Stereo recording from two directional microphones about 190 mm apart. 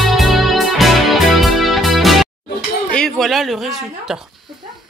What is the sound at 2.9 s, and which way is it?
Speech, centre (ahead or behind).